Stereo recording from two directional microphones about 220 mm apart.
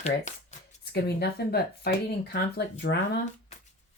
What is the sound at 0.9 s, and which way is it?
Speech, 45° left (ahead or behind).